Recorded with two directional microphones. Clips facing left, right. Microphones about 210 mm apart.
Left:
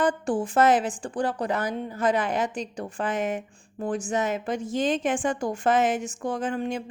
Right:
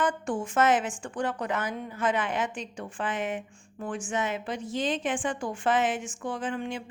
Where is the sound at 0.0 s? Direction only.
35° left (ahead or behind).